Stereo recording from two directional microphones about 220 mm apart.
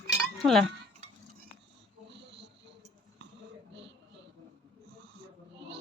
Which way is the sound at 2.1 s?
50° right (ahead or behind).